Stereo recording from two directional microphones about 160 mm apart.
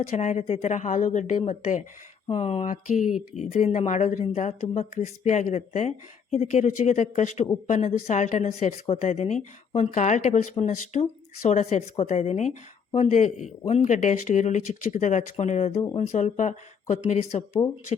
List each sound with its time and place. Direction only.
0.1 s a woman's voice: 45° left (ahead or behind)
15.8 s speech: 25° left (ahead or behind)
16.1 s a woman's voice: 50° left (ahead or behind)